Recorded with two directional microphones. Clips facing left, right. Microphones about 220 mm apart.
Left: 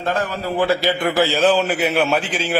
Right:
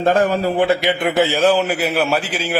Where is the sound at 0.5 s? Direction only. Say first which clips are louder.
Right 2 dB; 25° right (ahead or behind).